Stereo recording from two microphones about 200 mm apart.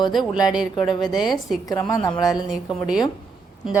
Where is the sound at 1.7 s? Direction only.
20° left (ahead or behind).